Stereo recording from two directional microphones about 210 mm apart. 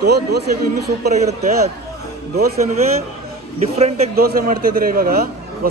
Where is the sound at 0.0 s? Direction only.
50° right (ahead or behind).